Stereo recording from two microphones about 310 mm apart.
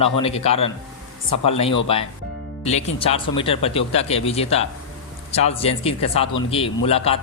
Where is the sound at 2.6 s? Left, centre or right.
Centre.